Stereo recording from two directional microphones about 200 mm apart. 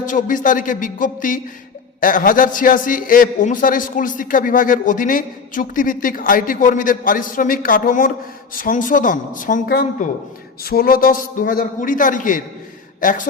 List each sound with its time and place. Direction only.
0.0 s a man's voice: 40° left (ahead or behind)